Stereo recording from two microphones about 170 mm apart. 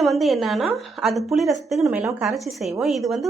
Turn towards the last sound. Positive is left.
turn(degrees=0)  # may be behind; listen again after turning